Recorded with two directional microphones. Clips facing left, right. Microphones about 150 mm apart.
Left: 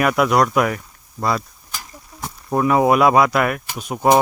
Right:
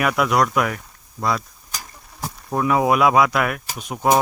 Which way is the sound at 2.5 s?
5° left (ahead or behind).